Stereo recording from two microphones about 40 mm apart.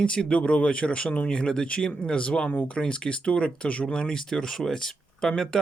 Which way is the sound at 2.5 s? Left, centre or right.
Left.